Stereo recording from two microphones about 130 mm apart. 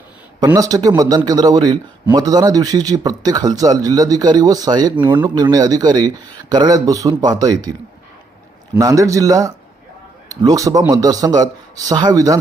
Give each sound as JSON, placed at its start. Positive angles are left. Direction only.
{"t": 0.3, "sound": "a man's voice", "side_deg": -30}